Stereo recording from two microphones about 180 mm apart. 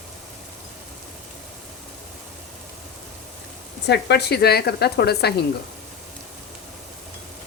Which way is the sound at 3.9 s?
70° left (ahead or behind).